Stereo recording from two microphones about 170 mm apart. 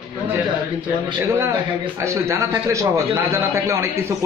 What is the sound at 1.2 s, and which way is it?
A man's voice, 15° right (ahead or behind).